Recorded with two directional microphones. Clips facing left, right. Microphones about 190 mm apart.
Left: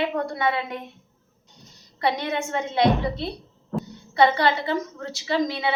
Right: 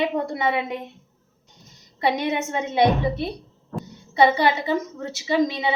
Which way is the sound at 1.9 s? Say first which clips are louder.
Right 2 dB; 20° right (ahead or behind).